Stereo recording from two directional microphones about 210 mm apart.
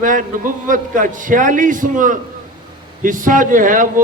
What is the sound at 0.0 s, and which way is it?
A man's voice, 40° right (ahead or behind).